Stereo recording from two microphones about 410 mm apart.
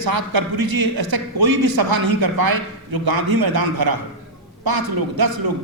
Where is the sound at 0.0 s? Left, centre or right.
Right.